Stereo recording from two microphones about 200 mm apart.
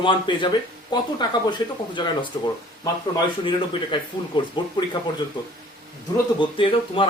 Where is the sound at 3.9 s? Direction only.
25° left (ahead or behind).